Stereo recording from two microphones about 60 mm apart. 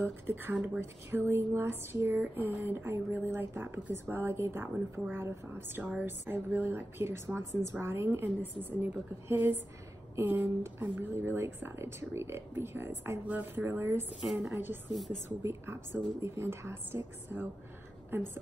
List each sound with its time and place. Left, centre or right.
0.0 s speech: right
13.3 s speech: right
13.7 s speech: right
14.2 s a woman's voice: centre
14.5 s speech: right
14.9 s a woman's voice: centre
15.4 s speech: right